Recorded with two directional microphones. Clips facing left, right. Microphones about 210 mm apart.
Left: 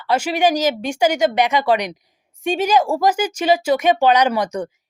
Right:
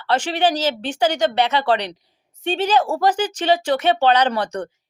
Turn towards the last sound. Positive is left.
turn(degrees=10)  # may be behind; listen again after turning